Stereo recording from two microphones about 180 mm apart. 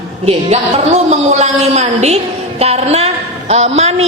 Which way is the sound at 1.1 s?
40° right (ahead or behind).